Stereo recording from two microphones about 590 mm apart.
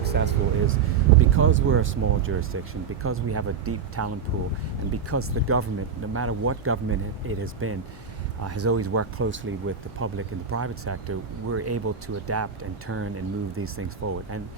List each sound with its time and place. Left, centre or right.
0.0 s speech: centre
5.1 s speech: right